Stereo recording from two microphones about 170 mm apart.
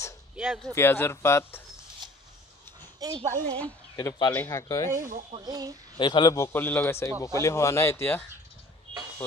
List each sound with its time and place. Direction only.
0.4 s speech: 5° right (ahead or behind)
0.7 s a man's voice: 15° left (ahead or behind)
3.0 s speech: 20° right (ahead or behind)
3.5 s a woman's voice: 5° left (ahead or behind)
4.0 s a man's voice: 25° left (ahead or behind)
5.3 s speech: 25° right (ahead or behind)
5.9 s a man's voice: 25° left (ahead or behind)